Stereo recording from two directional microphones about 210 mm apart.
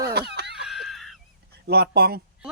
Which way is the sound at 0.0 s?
50° right (ahead or behind).